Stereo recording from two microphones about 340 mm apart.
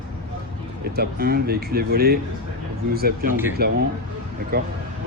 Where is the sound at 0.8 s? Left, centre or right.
Right.